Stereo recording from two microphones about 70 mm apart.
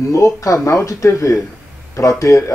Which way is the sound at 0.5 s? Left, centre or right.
Left.